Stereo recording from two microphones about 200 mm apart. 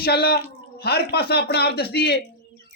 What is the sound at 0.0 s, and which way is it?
A man's voice, 50° left (ahead or behind).